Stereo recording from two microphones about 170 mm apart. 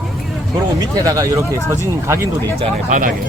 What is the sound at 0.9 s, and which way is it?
Speech, 20° right (ahead or behind).